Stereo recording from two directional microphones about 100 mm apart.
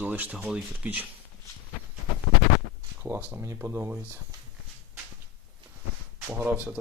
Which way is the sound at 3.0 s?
20° right (ahead or behind).